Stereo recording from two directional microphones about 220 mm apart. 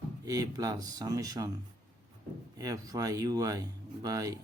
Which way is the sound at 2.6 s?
15° right (ahead or behind).